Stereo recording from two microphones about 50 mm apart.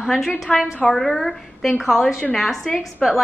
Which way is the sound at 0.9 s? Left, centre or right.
Centre.